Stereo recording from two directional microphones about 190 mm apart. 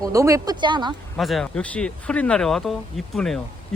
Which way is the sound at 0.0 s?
15° right (ahead or behind).